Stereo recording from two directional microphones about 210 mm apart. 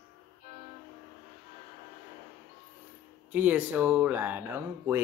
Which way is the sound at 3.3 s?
10° right (ahead or behind).